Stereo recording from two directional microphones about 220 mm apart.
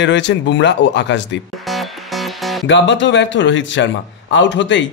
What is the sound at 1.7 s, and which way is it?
Music, centre (ahead or behind).